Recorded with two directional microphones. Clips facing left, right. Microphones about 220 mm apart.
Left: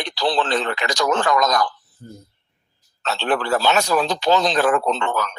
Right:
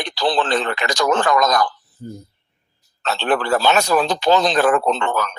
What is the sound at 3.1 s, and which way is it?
Speech, 50° right (ahead or behind).